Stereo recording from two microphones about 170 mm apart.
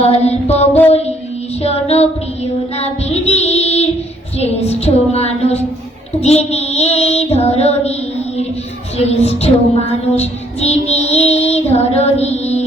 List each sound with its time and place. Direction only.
0.0 s child singing: 40° left (ahead or behind)
0.9 s music: 40° left (ahead or behind)
1.6 s child singing: 40° left (ahead or behind)
9.0 s child singing: 40° left (ahead or behind)